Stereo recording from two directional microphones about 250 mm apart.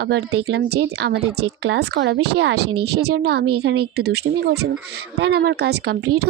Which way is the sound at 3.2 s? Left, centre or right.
Right.